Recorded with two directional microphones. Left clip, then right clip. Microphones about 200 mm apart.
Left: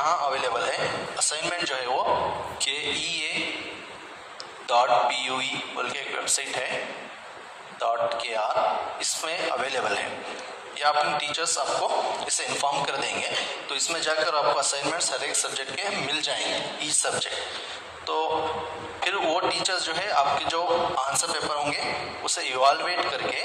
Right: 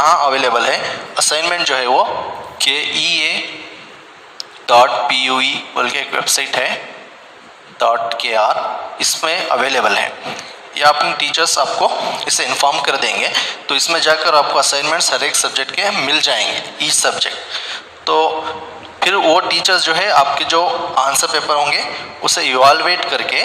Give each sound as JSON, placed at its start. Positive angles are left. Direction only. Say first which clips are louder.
{"t": 0.0, "sound": "a man's voice", "louder": "right 12 dB", "side_deg": -50}
{"t": 4.6, "sound": "a man's voice", "louder": "right 10 dB", "side_deg": -50}
{"t": 7.8, "sound": "a man's voice", "louder": "right 10 dB", "side_deg": -50}